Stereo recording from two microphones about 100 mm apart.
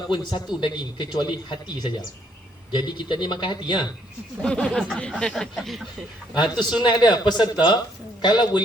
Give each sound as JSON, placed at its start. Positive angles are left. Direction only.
{"t": 0.1, "sound": "a man's voice", "side_deg": 50}
{"t": 4.4, "sound": "speech", "side_deg": 10}
{"t": 6.3, "sound": "a man's voice", "side_deg": 50}